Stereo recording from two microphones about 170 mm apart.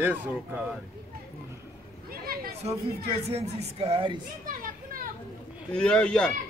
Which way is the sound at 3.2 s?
35° right (ahead or behind).